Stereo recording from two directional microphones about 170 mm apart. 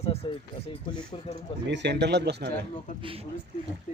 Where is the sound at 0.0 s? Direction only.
35° left (ahead or behind).